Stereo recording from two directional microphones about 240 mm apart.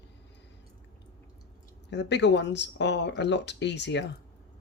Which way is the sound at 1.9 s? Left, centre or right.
Left.